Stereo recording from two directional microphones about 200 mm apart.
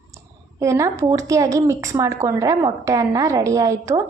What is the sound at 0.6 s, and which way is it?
A woman's voice, 15° right (ahead or behind).